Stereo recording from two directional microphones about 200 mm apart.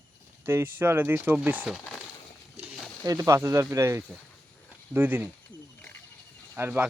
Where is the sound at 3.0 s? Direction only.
15° right (ahead or behind).